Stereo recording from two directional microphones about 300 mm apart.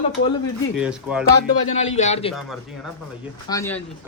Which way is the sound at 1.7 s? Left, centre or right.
Left.